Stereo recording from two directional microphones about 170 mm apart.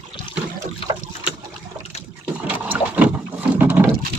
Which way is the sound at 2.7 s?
10° right (ahead or behind).